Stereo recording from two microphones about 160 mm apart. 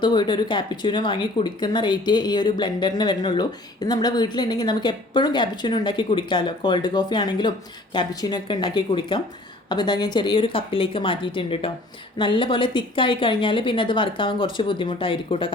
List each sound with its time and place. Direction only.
0.0 s a woman's voice: 30° left (ahead or behind)